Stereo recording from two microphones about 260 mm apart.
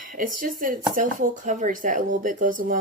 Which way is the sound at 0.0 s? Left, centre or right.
Right.